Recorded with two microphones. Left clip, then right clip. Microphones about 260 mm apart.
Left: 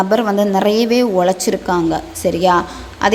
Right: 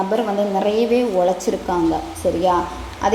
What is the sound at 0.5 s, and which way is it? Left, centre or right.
Speech, left.